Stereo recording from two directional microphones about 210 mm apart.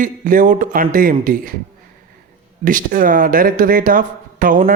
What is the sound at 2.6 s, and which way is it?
Speech, 40° right (ahead or behind).